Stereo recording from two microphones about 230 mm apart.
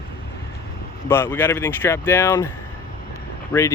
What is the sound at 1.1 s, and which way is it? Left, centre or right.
Speech, centre.